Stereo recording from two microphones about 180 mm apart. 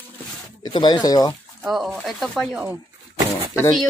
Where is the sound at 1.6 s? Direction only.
5° right (ahead or behind).